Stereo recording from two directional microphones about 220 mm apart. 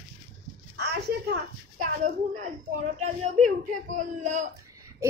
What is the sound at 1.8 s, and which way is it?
Speech, 35° right (ahead or behind).